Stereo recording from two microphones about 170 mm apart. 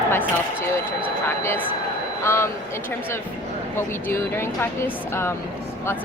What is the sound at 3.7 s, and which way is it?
Speech, 15° left (ahead or behind).